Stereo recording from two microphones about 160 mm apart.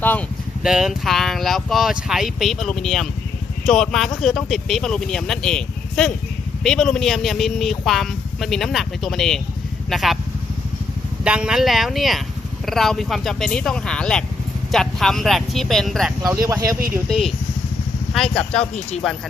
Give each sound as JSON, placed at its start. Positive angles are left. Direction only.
{"t": 0.0, "sound": "speech", "side_deg": 10}
{"t": 0.6, "sound": "speech", "side_deg": -5}
{"t": 11.2, "sound": "speech", "side_deg": -5}
{"t": 16.3, "sound": "speech", "side_deg": -20}
{"t": 17.1, "sound": "speech", "side_deg": 0}
{"t": 18.6, "sound": "speech", "side_deg": 40}